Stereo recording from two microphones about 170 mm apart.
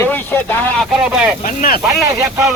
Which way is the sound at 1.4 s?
55° left (ahead or behind).